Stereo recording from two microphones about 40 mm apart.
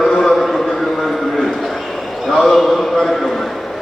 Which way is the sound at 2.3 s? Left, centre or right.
Centre.